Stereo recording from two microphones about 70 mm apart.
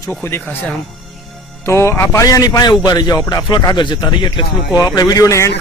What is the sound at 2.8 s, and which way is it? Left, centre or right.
Speech, left.